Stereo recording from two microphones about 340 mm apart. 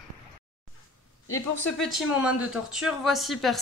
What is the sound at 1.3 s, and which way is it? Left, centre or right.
Speech, left.